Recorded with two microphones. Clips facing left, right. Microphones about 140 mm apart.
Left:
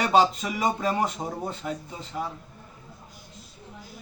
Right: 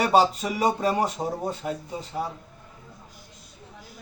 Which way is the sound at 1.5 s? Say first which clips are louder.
Right 2 dB; 40° right (ahead or behind).